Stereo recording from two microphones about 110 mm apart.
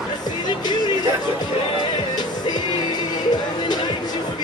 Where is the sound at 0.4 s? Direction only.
40° left (ahead or behind).